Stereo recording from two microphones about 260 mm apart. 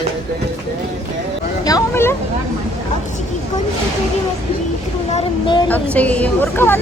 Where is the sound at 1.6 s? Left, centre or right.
Centre.